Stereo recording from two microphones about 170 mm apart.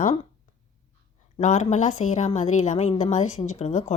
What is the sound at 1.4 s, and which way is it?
A woman's voice, 45° left (ahead or behind).